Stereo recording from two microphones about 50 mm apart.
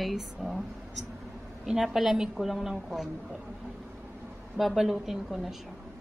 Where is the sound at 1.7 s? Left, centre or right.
Centre.